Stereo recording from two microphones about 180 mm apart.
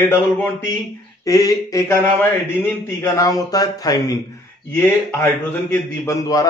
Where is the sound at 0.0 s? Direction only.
10° left (ahead or behind).